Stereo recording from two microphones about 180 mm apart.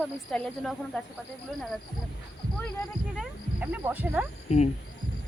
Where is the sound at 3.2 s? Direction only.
10° right (ahead or behind).